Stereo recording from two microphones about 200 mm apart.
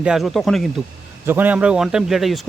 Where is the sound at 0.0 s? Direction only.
Centre (ahead or behind).